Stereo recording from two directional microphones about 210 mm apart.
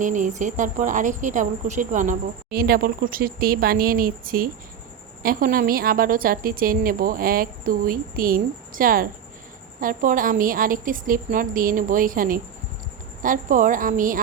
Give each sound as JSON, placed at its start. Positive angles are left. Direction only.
{"t": 0.0, "sound": "a woman's voice", "side_deg": -35}